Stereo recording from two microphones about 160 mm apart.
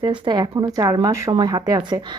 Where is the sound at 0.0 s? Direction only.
30° right (ahead or behind).